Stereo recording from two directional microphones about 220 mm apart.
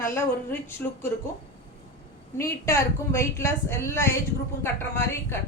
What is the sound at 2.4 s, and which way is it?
A woman's voice, 10° left (ahead or behind).